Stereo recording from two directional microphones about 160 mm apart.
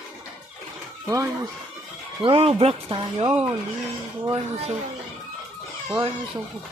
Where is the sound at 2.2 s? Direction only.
35° right (ahead or behind).